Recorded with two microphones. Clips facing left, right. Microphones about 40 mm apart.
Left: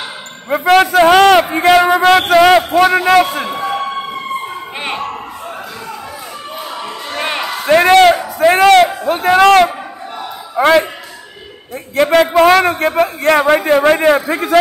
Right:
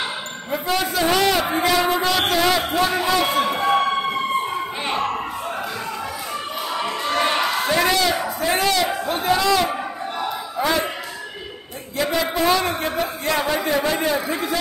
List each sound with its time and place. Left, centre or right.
0.5 s a man's voice: left
7.2 s a sound: left
7.6 s a man's voice: left
12.0 s a man's voice: left